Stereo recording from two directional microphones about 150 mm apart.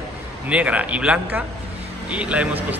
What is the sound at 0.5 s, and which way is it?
A man's voice, 10° right (ahead or behind).